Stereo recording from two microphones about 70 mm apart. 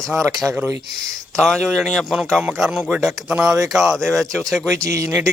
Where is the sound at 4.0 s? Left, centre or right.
Centre.